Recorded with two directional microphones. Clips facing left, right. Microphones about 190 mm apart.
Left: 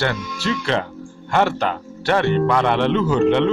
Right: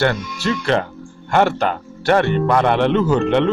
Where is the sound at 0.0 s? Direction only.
50° right (ahead or behind).